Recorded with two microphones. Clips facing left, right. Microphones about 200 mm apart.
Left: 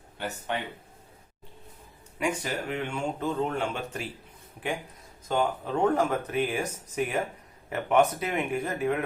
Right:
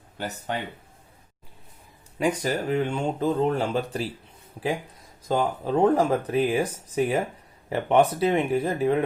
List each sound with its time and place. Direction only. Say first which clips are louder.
0.2 s speech: right 2 dB; 35° right (ahead or behind)
2.1 s speech: right 5 dB; 35° right (ahead or behind)
5.3 s speech: right 3 dB; 35° right (ahead or behind)